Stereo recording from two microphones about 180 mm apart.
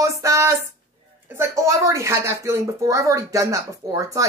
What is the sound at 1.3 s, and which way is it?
Speech, 15° right (ahead or behind).